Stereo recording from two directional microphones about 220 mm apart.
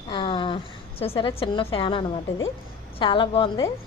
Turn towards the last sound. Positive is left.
turn(degrees=20)  # may be behind; listen again after turning